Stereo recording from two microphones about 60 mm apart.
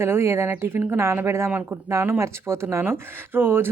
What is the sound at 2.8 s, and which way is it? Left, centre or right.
Speech, right.